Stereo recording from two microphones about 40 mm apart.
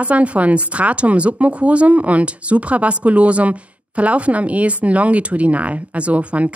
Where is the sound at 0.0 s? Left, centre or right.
Right.